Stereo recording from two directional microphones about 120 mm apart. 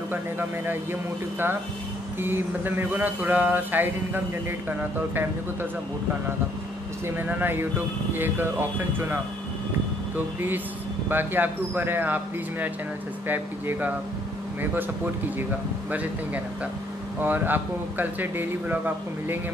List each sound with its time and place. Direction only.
0.1 s speech: 15° right (ahead or behind)
2.1 s speech: 15° right (ahead or behind)
7.2 s speech: 15° right (ahead or behind)
10.1 s speech: 15° right (ahead or behind)
17.2 s speech: 15° right (ahead or behind)